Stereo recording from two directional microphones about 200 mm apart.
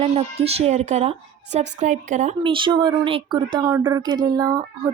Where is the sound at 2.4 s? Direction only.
25° right (ahead or behind).